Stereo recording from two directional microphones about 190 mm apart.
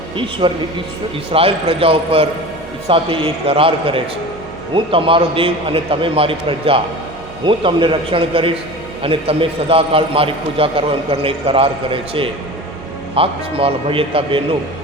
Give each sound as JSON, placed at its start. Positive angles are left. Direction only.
{"t": 0.2, "sound": "a man's voice", "side_deg": -25}